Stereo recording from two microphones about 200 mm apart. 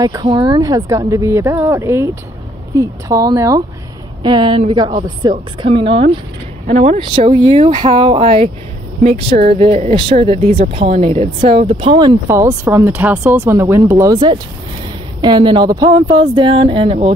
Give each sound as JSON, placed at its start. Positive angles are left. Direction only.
{"t": 0.0, "sound": "speech", "side_deg": -20}
{"t": 9.6, "sound": "speech", "side_deg": -30}
{"t": 12.3, "sound": "speech", "side_deg": -15}